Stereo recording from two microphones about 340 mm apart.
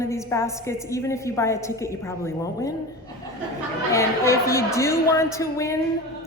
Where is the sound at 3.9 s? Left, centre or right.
Centre.